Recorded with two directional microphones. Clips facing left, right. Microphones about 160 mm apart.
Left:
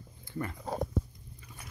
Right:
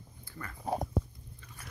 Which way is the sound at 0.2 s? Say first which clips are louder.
Left 9 dB; 20° left (ahead or behind).